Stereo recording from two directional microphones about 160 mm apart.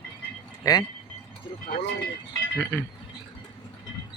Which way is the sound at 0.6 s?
20° left (ahead or behind).